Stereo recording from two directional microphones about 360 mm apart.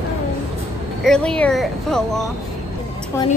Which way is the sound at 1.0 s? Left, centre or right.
Centre.